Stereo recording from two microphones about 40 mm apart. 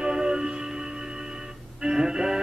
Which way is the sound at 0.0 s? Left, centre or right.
Centre.